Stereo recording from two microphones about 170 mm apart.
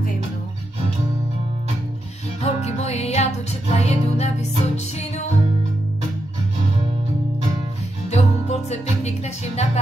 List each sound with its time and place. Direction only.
2.4 s music: 40° left (ahead or behind)
8.1 s music: 40° left (ahead or behind)